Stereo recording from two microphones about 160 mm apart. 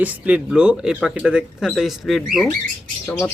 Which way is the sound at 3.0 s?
15° left (ahead or behind).